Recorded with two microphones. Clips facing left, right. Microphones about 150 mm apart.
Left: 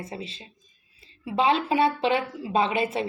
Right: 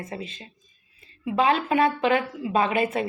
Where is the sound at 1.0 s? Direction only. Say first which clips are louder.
Right 2 dB; 30° left (ahead or behind).